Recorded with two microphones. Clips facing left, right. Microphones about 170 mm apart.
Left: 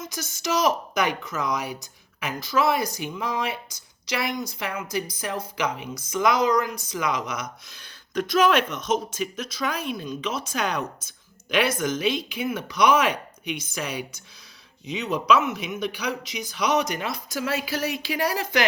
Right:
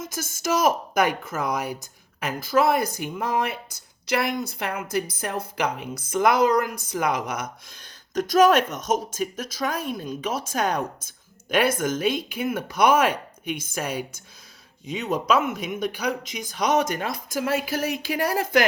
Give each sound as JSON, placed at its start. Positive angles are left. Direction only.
{"t": 0.0, "sound": "a woman's voice", "side_deg": -50}